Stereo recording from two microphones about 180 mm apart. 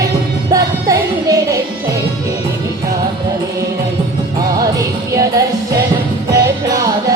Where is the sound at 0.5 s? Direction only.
20° right (ahead or behind).